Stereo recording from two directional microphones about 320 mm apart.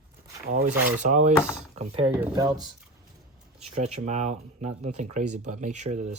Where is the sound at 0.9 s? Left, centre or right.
Right.